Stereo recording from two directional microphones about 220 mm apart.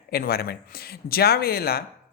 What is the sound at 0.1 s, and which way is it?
Speech, 45° left (ahead or behind).